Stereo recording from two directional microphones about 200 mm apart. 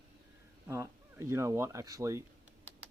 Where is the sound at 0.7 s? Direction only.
15° right (ahead or behind).